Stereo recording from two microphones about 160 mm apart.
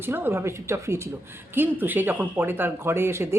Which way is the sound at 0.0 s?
15° right (ahead or behind).